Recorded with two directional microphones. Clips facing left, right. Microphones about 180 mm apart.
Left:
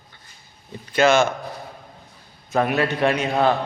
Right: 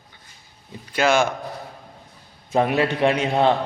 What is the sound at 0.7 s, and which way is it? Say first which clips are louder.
Speech: left 2 dB; 10° right (ahead or behind).